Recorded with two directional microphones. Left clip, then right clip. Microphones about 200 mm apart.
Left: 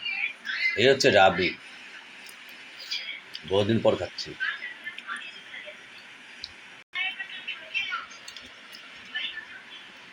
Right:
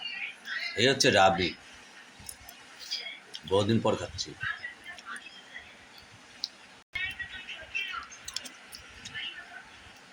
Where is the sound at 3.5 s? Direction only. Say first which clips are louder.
Left 3 dB; 20° right (ahead or behind).